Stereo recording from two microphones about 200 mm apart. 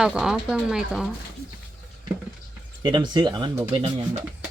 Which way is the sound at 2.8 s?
20° right (ahead or behind).